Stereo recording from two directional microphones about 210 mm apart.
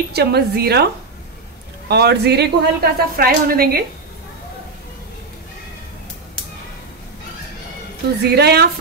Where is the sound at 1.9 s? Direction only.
50° right (ahead or behind).